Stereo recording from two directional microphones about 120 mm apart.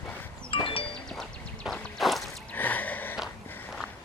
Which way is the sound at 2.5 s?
15° left (ahead or behind).